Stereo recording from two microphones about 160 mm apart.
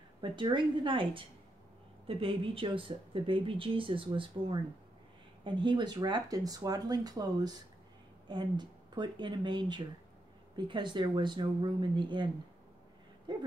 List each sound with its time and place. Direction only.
0.2 s speech: 30° right (ahead or behind)
13.3 s speech: 30° right (ahead or behind)